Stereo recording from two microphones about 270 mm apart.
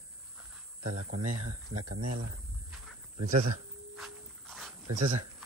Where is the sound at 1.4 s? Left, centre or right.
Right.